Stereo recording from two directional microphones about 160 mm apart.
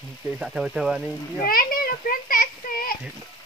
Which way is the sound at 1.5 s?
65° left (ahead or behind).